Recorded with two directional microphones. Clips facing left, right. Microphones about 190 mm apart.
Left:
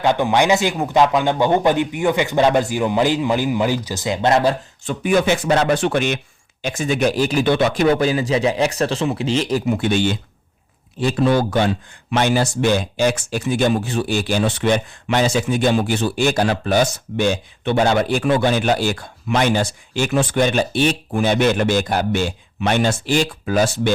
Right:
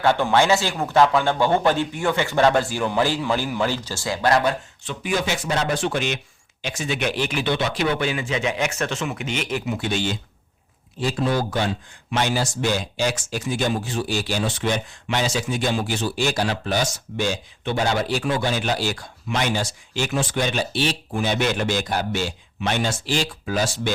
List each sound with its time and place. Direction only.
0.0 s speech: 15° left (ahead or behind)
4.9 s speech: 55° left (ahead or behind); by 9.6 s 35° left (ahead or behind)
9.6 s speech: 55° left (ahead or behind)
11.0 s speech: 70° left (ahead or behind)